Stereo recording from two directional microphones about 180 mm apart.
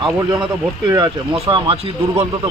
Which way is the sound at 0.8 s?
25° right (ahead or behind).